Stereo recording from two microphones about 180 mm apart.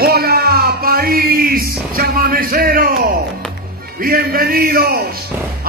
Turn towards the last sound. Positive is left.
turn(degrees=-60)  # may be behind; listen again after turning